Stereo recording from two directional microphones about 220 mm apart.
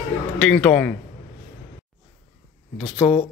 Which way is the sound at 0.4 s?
5° left (ahead or behind).